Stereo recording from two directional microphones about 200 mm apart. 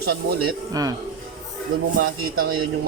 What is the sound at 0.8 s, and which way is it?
Speech, 20° right (ahead or behind).